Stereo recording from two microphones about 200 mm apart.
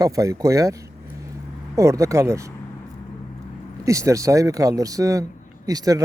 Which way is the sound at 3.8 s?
15° right (ahead or behind).